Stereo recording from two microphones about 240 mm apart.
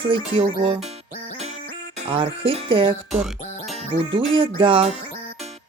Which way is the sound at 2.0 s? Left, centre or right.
Right.